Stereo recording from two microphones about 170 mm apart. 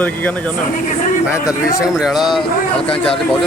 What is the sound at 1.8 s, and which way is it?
Speech, centre (ahead or behind).